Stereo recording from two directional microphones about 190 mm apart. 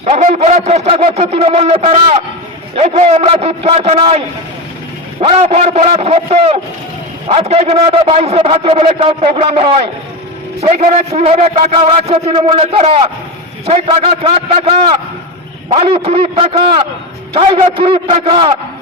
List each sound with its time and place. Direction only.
0.0 s a man's voice: 35° right (ahead or behind)
5.2 s a man's voice: 30° right (ahead or behind)